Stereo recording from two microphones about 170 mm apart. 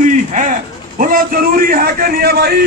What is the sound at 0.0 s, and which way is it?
A man's voice, 50° right (ahead or behind).